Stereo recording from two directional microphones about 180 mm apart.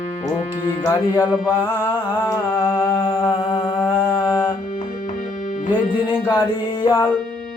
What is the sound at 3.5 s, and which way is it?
Mantra, 20° left (ahead or behind).